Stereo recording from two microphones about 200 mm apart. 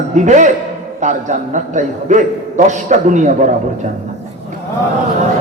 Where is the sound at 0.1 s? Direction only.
40° right (ahead or behind).